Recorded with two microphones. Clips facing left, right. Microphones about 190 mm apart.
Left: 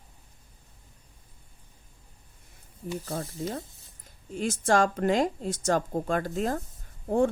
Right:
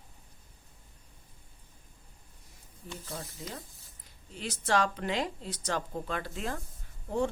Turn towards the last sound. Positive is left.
turn(degrees=50)  # may be behind; listen again after turning